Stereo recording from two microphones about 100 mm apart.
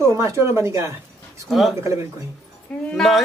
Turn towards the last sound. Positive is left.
turn(degrees=5)  # may be behind; listen again after turning